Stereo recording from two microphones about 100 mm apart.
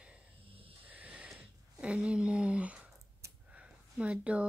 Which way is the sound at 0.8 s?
15° right (ahead or behind).